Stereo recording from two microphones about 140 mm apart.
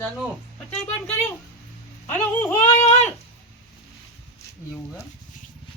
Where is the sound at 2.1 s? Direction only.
10° left (ahead or behind).